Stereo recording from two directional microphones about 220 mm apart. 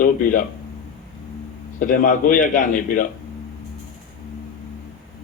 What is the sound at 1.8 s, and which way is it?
Speech, 35° left (ahead or behind).